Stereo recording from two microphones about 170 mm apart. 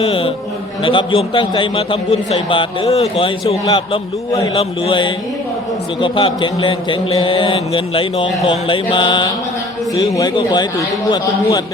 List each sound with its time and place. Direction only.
0.0 s a man's voice: 35° left (ahead or behind)